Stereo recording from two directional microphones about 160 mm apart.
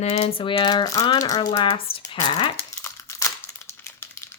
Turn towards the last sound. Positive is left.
turn(degrees=15)  # may be behind; listen again after turning